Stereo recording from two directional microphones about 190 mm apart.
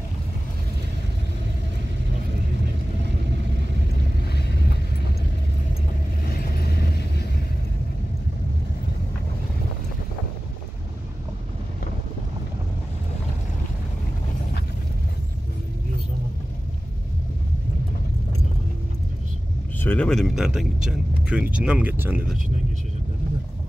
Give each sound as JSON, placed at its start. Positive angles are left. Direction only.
{"t": 4.3, "sound": "vehicle", "side_deg": 60}
{"t": 6.3, "sound": "vehicle", "side_deg": 55}
{"t": 19.8, "sound": "speech", "side_deg": 10}